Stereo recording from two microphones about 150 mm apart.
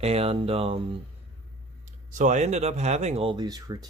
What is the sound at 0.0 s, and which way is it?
Speech, 40° right (ahead or behind).